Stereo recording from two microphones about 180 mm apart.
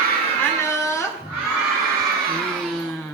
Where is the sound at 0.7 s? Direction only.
15° left (ahead or behind).